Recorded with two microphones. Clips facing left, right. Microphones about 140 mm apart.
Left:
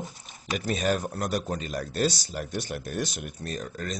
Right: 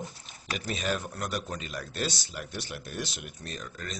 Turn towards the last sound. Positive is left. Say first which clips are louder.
# left 6 dB
turn(degrees=40)  # may be behind; listen again after turning